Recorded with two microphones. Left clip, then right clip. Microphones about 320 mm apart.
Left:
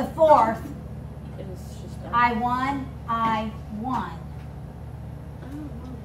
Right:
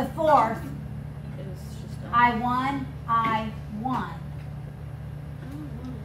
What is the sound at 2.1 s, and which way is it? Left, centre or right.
A woman's voice, centre.